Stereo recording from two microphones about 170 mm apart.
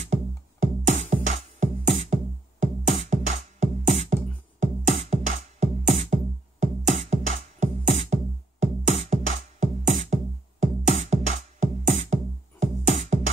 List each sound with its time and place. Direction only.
0.0 s music: 45° right (ahead or behind)